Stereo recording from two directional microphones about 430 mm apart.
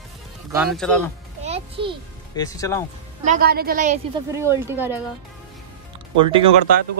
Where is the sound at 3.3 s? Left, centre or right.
Right; by 4.9 s centre.